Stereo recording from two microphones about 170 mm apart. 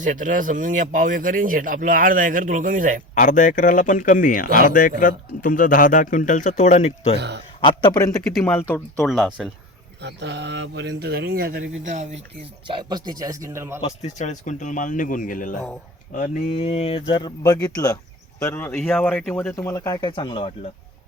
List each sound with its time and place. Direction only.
0.0 s speech: 50° right (ahead or behind)
3.2 s a man's voice: 50° left (ahead or behind)
4.4 s speech: 60° right (ahead or behind)
4.7 s a man's voice: 55° left (ahead or behind); by 7.2 s 35° left (ahead or behind)
7.2 s a man's voice: 85° right
7.6 s speech: 25° left (ahead or behind)
8.4 s speech: 10° left (ahead or behind)
9.0 s speech: centre (ahead or behind)
10.0 s speech: 90° right
12.6 s speech: 25° right (ahead or behind)
13.8 s a man's voice: 40° left (ahead or behind)
16.6 s speech: 40° left (ahead or behind); by 18.7 s 15° left (ahead or behind)
18.7 s speech: 5° left (ahead or behind)
19.5 s speech: 20° left (ahead or behind)